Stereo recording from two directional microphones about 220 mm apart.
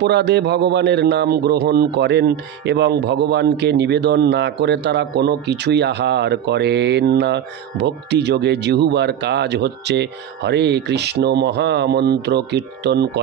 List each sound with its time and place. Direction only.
0.0 s a man's voice: 50° right (ahead or behind)